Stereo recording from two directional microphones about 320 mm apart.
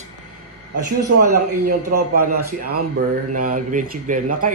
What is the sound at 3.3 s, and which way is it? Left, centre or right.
Speech, right.